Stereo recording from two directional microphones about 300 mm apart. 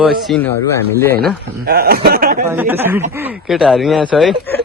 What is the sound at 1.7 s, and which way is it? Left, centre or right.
Speech, right.